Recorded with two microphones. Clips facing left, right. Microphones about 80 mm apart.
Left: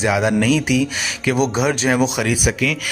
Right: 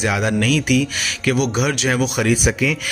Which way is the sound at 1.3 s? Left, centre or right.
Left.